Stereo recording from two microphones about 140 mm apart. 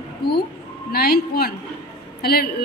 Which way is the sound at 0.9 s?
90° left.